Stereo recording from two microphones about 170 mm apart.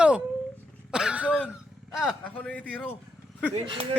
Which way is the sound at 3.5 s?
30° right (ahead or behind).